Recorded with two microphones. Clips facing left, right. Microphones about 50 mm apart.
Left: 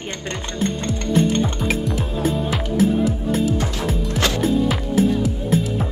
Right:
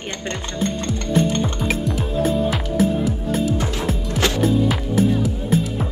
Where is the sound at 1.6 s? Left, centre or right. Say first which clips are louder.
Even; centre.